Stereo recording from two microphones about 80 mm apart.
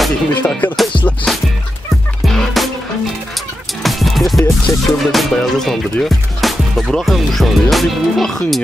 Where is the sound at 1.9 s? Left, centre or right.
Centre.